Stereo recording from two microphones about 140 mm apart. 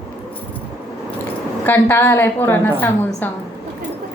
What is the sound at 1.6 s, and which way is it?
A woman's voice, 15° left (ahead or behind).